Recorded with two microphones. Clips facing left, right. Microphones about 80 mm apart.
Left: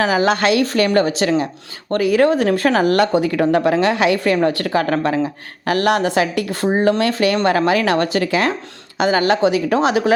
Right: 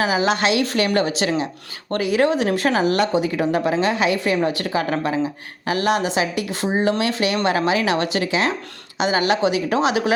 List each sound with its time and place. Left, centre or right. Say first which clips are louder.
0.0 s a woman's voice: left 3 dB; left
6.7 s a woman's voice: left 3 dB; left